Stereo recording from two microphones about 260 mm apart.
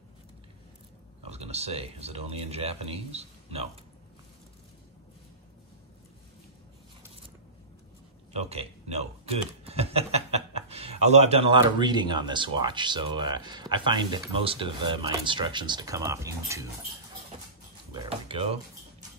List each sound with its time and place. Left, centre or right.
1.2 s speech: right
8.3 s speech: right
17.9 s a sound: centre